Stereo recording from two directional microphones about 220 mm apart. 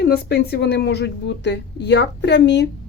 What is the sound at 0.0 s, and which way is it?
Speech, 45° left (ahead or behind).